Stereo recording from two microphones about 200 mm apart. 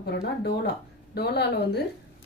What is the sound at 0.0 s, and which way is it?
A woman's voice, 50° left (ahead or behind).